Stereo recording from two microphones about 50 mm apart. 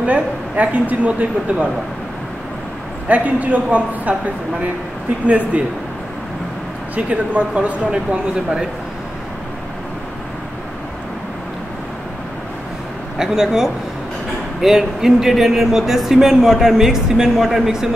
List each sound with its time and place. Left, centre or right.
0.0 s speech: right
3.1 s speech: right
5.2 s speech: right
7.0 s speech: right
13.2 s speech: centre